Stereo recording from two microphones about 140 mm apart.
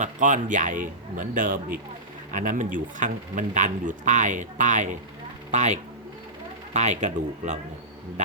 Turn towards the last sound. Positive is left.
turn(degrees=-60)  # may be behind; listen again after turning